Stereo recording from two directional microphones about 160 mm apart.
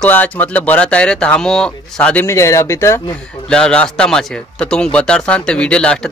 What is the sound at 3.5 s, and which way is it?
Speech, 5° left (ahead or behind).